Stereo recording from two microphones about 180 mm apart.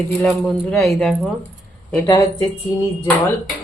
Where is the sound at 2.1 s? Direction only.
25° left (ahead or behind).